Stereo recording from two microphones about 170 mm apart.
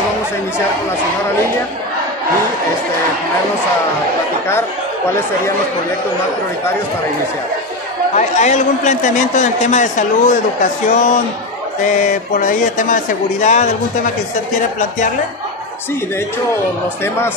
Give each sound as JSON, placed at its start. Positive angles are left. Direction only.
{"t": 8.2, "sound": "a man's voice", "side_deg": 45}